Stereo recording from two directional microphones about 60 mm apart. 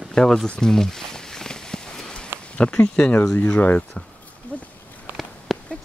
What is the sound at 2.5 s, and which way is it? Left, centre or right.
Speech, left.